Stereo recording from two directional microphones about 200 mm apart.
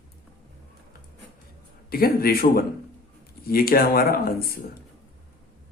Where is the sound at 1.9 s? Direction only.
50° left (ahead or behind).